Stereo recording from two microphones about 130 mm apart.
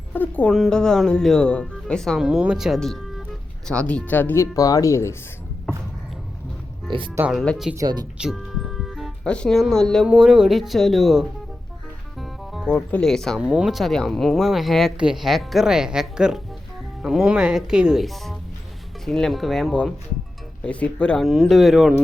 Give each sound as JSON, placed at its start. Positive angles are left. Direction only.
{"t": 0.1, "sound": "speech", "side_deg": 10}
{"t": 2.2, "sound": "speech", "side_deg": -5}
{"t": 4.5, "sound": "speech", "side_deg": 25}
{"t": 6.9, "sound": "speech", "side_deg": -40}
{"t": 7.3, "sound": "speech", "side_deg": 0}
{"t": 7.8, "sound": "speech", "side_deg": -30}
{"t": 8.2, "sound": "speech", "side_deg": 0}
{"t": 13.4, "sound": "speech", "side_deg": -5}